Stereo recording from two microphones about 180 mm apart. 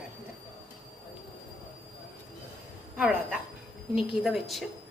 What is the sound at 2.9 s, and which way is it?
A woman's voice, 5° right (ahead or behind).